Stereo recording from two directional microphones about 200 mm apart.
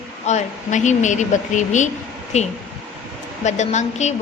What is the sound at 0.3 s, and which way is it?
A woman's voice, 35° left (ahead or behind).